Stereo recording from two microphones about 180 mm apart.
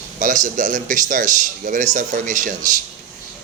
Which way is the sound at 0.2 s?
45° right (ahead or behind).